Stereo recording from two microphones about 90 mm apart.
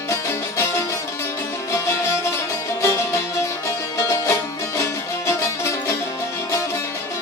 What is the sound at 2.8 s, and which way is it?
Music, 35° left (ahead or behind).